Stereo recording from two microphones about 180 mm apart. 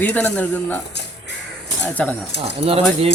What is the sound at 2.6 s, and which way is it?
Speech, 30° right (ahead or behind).